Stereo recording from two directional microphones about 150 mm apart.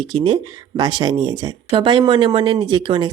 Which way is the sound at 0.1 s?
30° right (ahead or behind).